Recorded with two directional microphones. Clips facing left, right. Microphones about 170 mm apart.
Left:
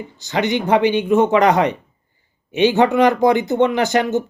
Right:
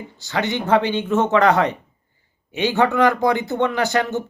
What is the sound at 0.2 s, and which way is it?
Speech, 20° left (ahead or behind).